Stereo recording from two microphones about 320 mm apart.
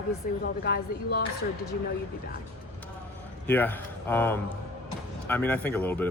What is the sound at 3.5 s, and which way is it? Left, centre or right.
A man's voice, centre.